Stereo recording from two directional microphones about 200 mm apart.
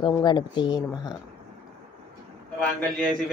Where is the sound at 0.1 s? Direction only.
20° left (ahead or behind).